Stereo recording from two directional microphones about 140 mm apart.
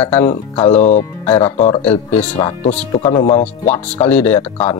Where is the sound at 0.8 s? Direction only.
55° left (ahead or behind).